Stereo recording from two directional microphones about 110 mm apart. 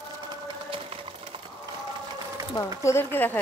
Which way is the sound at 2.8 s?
25° left (ahead or behind).